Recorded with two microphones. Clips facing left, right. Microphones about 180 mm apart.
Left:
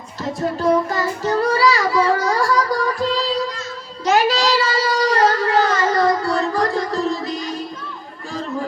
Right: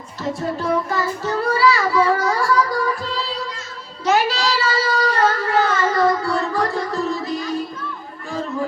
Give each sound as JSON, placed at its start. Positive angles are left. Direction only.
{"t": 0.6, "sound": "child singing", "side_deg": 40}